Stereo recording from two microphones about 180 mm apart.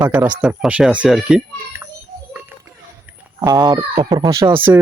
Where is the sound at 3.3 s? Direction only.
20° right (ahead or behind).